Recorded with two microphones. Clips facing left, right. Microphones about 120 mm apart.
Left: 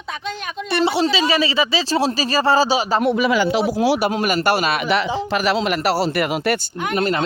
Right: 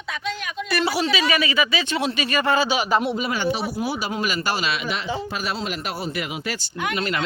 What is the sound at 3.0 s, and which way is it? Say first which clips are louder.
Speech: left 5 dB; 55° left (ahead or behind).